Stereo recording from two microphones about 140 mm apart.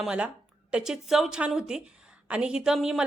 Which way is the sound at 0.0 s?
5° right (ahead or behind).